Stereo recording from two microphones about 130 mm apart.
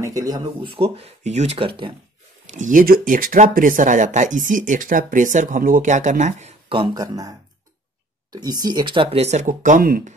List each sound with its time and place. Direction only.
0.0 s speech: 25° right (ahead or behind)
0.7 s speech: 45° right (ahead or behind)
2.5 s speech: 80° right
6.7 s speech: 40° right (ahead or behind)
7.0 s speech: 30° right (ahead or behind); by 10.1 s 90° right